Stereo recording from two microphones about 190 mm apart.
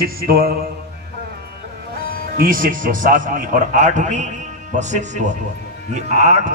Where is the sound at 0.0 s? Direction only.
50° right (ahead or behind).